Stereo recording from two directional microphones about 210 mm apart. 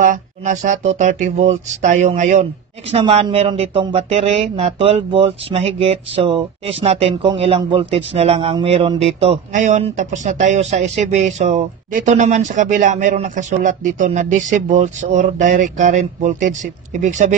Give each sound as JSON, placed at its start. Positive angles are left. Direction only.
{"t": 0.0, "sound": "speech", "side_deg": -35}